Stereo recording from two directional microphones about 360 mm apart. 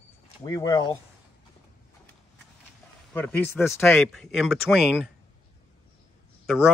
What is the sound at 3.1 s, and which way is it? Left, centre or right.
Speech, centre.